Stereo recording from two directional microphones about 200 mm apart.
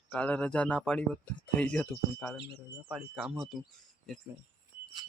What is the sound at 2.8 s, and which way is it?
Speech, 5° right (ahead or behind).